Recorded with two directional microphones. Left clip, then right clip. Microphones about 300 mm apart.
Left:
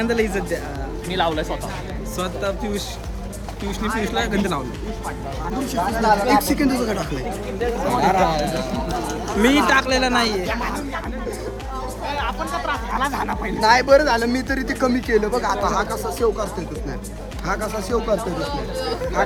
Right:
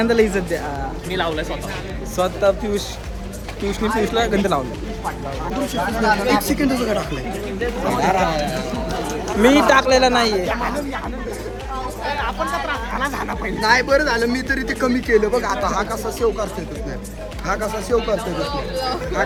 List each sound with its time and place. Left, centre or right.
0.0 s a woman's voice: centre
1.1 s speech: left
2.1 s speech: centre
5.8 s speech: left
6.5 s speech: centre
7.9 s speech: centre
9.3 s speech: centre
12.2 s speech: centre
13.6 s speech: left